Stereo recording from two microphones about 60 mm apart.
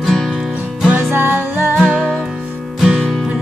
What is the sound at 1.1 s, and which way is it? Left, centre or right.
Music, right.